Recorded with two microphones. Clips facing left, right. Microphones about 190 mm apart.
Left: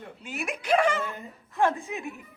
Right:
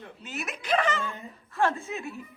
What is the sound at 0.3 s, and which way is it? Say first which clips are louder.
A woman's voice: left 3 dB; 10° left (ahead or behind).